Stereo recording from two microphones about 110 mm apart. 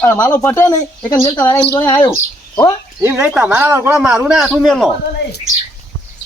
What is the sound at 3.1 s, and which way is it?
Speech, 10° right (ahead or behind).